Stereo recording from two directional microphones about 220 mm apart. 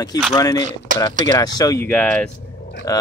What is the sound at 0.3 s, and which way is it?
Speech, 15° left (ahead or behind).